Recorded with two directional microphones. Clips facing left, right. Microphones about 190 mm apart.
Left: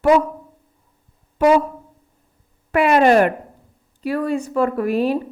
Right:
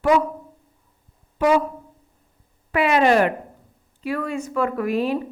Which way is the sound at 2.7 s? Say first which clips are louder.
Left 4 dB; 45° left (ahead or behind).